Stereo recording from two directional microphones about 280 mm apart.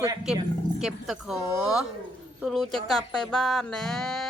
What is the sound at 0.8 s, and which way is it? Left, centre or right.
Music, centre.